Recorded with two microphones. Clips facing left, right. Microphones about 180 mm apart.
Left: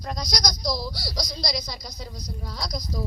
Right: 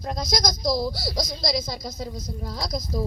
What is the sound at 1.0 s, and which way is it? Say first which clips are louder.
Speech: right 4 dB; 25° right (ahead or behind).